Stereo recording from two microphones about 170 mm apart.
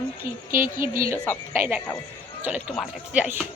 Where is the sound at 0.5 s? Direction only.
55° right (ahead or behind).